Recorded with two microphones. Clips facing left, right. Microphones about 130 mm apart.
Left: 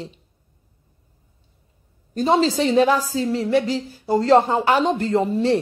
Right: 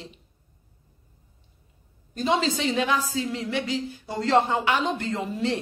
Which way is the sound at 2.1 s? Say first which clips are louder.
Left 6 dB; 35° left (ahead or behind).